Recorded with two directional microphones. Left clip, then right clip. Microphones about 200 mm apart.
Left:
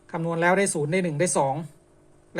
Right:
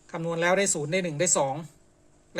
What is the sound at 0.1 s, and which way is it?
Speech, centre (ahead or behind).